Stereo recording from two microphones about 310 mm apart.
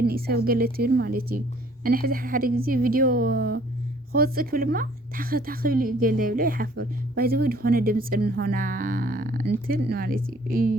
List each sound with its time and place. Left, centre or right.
0.0 s a woman's voice: right